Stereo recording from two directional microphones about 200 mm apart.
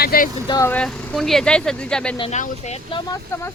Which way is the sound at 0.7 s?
5° left (ahead or behind).